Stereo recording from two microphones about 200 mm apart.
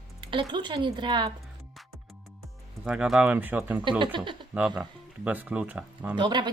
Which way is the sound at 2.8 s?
5° right (ahead or behind).